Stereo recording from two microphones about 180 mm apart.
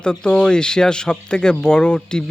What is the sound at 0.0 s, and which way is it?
Speech, 5° left (ahead or behind).